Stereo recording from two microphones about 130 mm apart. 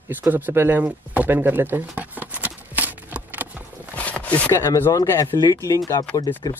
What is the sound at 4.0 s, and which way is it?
Speech, 10° left (ahead or behind).